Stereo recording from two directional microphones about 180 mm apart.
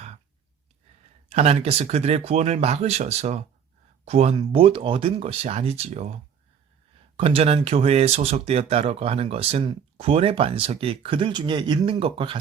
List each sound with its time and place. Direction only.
1.3 s speech: 35° right (ahead or behind)
7.2 s speech: 30° right (ahead or behind)